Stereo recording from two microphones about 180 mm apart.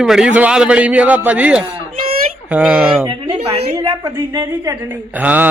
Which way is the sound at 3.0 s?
25° right (ahead or behind).